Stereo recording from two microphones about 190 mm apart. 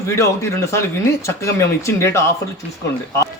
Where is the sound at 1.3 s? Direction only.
15° left (ahead or behind).